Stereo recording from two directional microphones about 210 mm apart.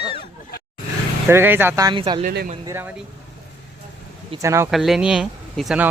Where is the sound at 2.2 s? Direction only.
40° right (ahead or behind).